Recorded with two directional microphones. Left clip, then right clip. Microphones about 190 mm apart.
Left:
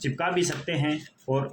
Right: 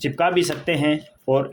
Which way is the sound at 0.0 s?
45° right (ahead or behind).